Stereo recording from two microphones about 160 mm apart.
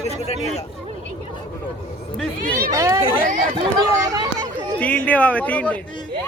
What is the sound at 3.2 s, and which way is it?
Chatter, 50° right (ahead or behind).